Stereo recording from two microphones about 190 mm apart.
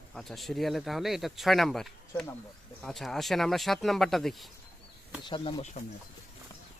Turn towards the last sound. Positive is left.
turn(degrees=40)  # may be behind; listen again after turning